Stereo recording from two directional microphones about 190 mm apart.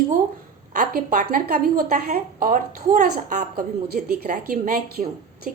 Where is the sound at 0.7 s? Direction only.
40° right (ahead or behind).